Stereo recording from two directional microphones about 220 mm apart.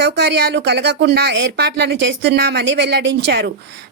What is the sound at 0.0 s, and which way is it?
A woman's voice, 50° right (ahead or behind).